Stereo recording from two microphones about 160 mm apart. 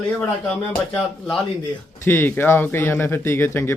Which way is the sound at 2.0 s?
15° left (ahead or behind).